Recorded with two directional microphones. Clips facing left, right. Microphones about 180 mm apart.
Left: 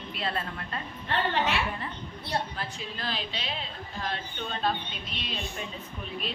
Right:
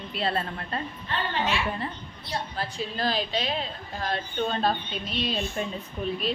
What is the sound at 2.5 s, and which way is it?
A woman's voice, 35° right (ahead or behind).